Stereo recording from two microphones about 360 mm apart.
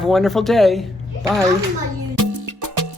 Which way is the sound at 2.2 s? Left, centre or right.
Right.